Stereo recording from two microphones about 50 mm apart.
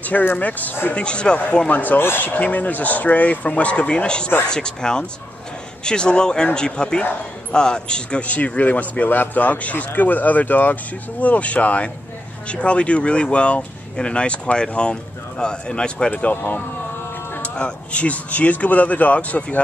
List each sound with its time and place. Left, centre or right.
0.4 s speech: left
0.9 s speech: left
1.7 s speech: left
2.0 s speech: left; by 16.1 s centre
16.1 s speech: left
17.4 s speech: left